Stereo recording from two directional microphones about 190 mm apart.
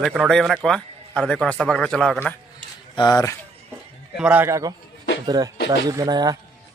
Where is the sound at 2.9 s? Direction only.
20° left (ahead or behind).